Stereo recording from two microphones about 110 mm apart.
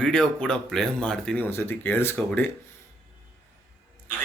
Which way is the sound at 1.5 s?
20° left (ahead or behind).